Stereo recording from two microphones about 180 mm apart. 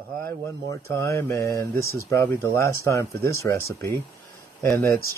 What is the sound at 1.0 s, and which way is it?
Speech, 15° left (ahead or behind).